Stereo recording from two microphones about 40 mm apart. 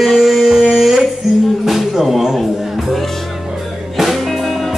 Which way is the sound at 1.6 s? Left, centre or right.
Centre.